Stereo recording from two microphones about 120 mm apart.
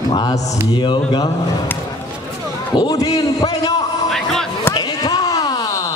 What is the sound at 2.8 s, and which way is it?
Speech, 30° left (ahead or behind).